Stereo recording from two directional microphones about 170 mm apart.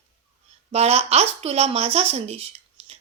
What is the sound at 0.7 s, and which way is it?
Speech, 35° right (ahead or behind).